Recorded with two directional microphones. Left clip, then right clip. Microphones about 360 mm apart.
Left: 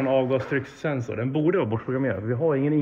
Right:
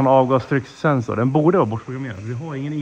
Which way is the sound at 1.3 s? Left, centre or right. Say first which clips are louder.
Right 7 dB; centre.